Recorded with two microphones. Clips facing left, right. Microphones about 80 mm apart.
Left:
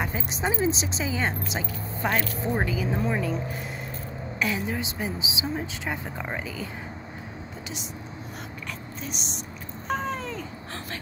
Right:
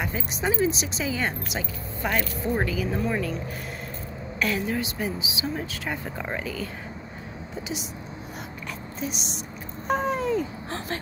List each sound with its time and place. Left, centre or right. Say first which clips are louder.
0.0 s speech: even; left
4.4 s speech: right 2 dB; centre
6.1 s speech: right 2 dB; centre
9.0 s speech: right 6 dB; centre
9.8 s cat: right 5 dB; centre